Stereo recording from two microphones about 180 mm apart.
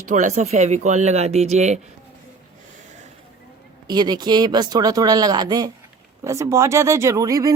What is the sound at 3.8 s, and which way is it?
Speech, 25° right (ahead or behind).